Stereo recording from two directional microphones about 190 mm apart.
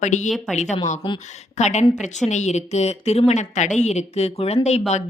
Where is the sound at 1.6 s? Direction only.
35° left (ahead or behind).